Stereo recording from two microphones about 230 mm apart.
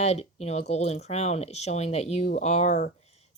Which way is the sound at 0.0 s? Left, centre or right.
Left.